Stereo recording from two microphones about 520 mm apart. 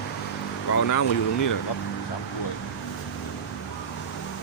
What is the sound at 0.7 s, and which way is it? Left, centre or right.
Speech, left.